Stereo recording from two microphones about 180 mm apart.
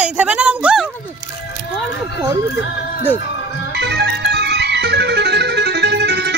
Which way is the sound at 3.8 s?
70° right (ahead or behind).